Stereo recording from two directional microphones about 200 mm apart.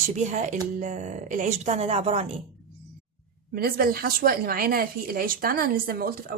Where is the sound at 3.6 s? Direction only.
50° right (ahead or behind).